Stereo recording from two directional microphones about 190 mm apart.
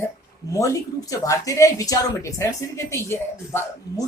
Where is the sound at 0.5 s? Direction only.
15° left (ahead or behind).